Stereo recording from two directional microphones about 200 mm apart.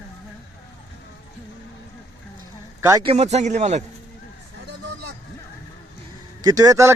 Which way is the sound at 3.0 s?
35° right (ahead or behind).